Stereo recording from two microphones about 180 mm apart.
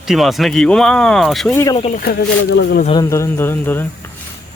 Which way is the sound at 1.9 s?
60° left (ahead or behind).